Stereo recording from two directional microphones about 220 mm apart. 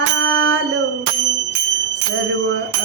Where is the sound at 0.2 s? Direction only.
55° right (ahead or behind).